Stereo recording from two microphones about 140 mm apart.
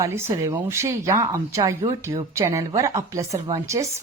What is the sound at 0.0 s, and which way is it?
Speech, 20° right (ahead or behind).